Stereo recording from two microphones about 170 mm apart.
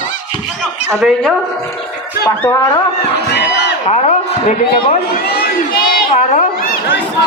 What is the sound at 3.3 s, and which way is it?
Crowd, 90° left.